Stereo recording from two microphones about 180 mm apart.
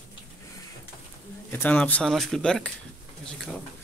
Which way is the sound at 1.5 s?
10° left (ahead or behind).